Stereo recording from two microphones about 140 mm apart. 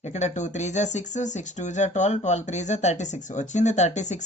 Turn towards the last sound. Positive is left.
turn(degrees=55)  # may be behind; listen again after turning